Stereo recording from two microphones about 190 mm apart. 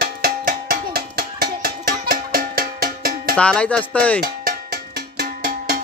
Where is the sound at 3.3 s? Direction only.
5° left (ahead or behind).